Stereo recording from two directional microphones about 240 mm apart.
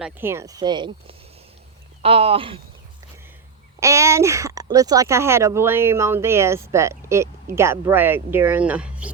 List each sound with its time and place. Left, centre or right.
0.0 s speech: centre
3.8 s speech: centre